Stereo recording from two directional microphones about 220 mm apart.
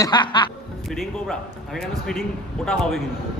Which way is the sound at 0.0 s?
20° left (ahead or behind).